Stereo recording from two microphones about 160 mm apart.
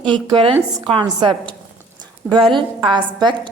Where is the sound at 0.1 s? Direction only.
30° right (ahead or behind).